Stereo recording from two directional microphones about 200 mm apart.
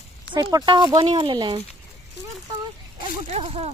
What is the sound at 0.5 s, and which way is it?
Speech, 20° right (ahead or behind).